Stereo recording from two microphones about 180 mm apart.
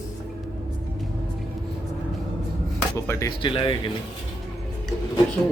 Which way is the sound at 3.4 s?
25° left (ahead or behind).